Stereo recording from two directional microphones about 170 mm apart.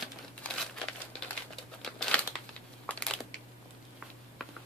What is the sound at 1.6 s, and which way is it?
Crumpling, centre (ahead or behind).